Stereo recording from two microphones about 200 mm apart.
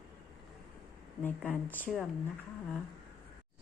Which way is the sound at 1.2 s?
10° left (ahead or behind).